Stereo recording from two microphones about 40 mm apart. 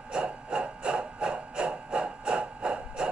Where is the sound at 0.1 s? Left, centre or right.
Right.